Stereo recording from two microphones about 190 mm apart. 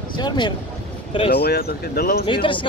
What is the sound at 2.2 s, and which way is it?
Speech, 25° left (ahead or behind).